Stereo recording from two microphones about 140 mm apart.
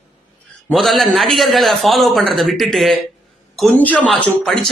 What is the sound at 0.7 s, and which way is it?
A man's voice, centre (ahead or behind).